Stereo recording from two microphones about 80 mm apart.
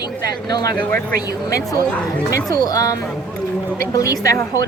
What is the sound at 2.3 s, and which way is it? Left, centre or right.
Speech, left.